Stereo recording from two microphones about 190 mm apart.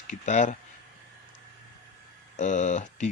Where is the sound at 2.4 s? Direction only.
40° left (ahead or behind).